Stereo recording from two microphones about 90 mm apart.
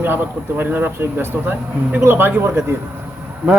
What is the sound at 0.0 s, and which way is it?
Speech, 20° right (ahead or behind).